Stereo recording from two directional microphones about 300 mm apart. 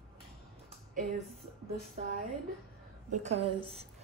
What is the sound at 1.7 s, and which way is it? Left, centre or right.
A woman's voice, right.